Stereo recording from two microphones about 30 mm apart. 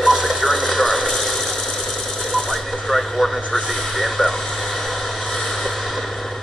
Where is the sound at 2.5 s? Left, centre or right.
Centre.